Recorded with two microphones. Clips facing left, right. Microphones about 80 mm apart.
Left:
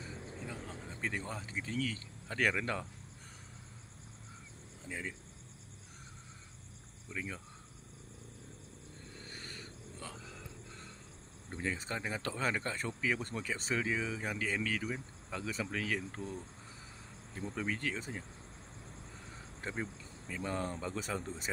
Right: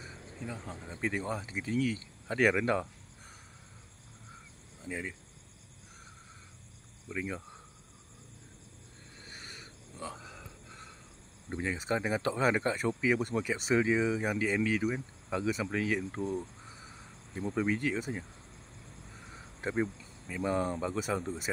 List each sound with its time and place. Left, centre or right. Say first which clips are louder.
0.6 s speech: right 4 dB; centre
4.8 s speech: right 4 dB; centre
7.1 s speech: right 5 dB; centre
9.2 s a sound: right 1 dB; centre
11.5 s speech: right 6 dB; centre
19.3 s cricket: right 8 dB; centre
20.0 s speech: right 5 dB; centre